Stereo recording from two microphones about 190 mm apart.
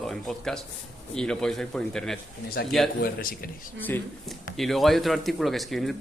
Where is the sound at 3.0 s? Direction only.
50° left (ahead or behind).